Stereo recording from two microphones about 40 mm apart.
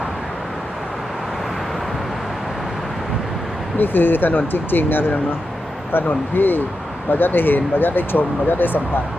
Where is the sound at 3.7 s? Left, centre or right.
Left.